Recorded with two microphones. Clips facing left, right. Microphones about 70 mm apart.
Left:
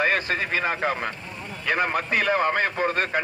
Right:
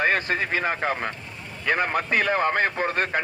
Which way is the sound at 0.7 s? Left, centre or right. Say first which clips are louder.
Even; right.